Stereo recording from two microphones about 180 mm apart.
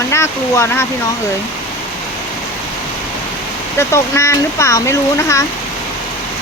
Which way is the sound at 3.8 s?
15° left (ahead or behind).